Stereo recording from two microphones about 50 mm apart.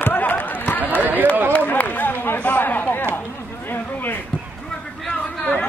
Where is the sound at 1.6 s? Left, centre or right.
Left.